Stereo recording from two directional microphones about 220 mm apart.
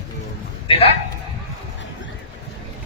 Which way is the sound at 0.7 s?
25° left (ahead or behind).